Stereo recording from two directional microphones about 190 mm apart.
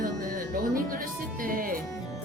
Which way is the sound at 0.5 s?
45° right (ahead or behind).